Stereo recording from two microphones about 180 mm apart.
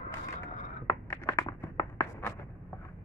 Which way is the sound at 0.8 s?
15° left (ahead or behind).